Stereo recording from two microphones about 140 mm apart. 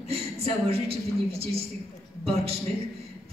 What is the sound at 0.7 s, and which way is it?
A woman's voice, 45° right (ahead or behind).